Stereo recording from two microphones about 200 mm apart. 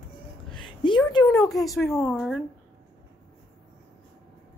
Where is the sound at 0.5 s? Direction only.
25° left (ahead or behind).